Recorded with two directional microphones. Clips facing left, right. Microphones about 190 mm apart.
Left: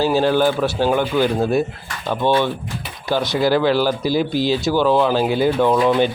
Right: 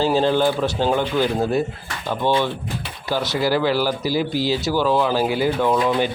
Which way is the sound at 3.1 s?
20° left (ahead or behind).